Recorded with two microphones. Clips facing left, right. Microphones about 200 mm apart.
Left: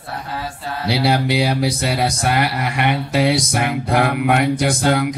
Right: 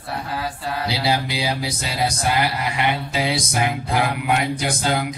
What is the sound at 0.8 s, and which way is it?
Mantra, 65° left (ahead or behind).